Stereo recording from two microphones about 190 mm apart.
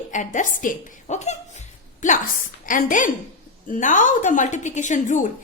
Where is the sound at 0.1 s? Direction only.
40° left (ahead or behind).